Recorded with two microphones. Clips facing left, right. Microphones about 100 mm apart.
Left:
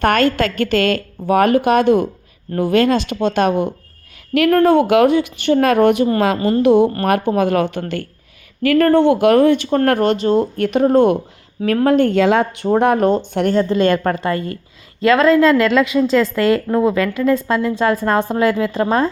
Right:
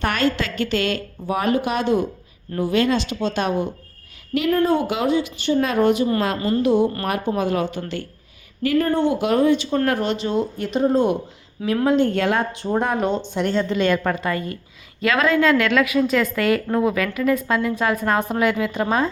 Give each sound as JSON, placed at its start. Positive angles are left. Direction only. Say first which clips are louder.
{"t": 0.0, "sound": "a woman's voice", "louder": "left 7 dB", "side_deg": 50}
{"t": 4.4, "sound": "speech", "louder": "left 7 dB", "side_deg": 70}
{"t": 6.6, "sound": "speech", "louder": "left 6 dB", "side_deg": 70}
{"t": 8.6, "sound": "speech", "louder": "left 7 dB", "side_deg": 80}
{"t": 10.6, "sound": "a woman's voice", "louder": "left 5 dB", "side_deg": 65}
{"t": 12.1, "sound": "speech", "louder": "left 7 dB", "side_deg": 80}
{"t": 13.1, "sound": "a woman's voice", "louder": "left 6 dB", "side_deg": 45}